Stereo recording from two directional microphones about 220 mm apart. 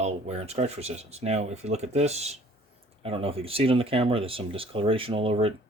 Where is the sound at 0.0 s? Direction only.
30° right (ahead or behind).